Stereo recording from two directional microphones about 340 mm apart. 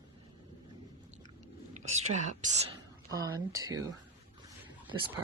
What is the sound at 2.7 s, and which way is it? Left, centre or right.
Speech, centre.